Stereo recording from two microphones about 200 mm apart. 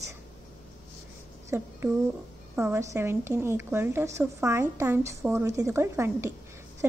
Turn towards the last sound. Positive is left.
turn(degrees=-10)  # may be behind; listen again after turning